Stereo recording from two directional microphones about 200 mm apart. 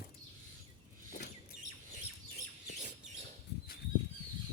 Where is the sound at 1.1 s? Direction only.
45° left (ahead or behind).